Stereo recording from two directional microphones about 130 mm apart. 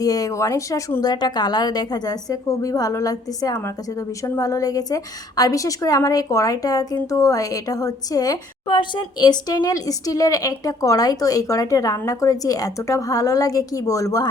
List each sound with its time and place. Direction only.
0.0 s a woman's voice: 25° left (ahead or behind)